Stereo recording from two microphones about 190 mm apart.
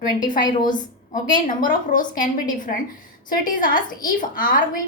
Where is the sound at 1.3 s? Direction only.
45° left (ahead or behind).